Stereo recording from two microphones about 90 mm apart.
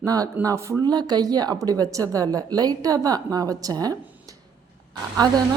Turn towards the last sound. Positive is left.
turn(degrees=-50)  # may be behind; listen again after turning